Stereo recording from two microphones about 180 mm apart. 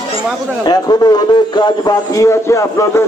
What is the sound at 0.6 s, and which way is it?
A man's voice, 20° left (ahead or behind).